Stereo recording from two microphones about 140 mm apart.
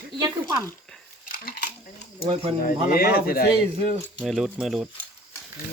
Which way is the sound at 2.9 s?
90° left.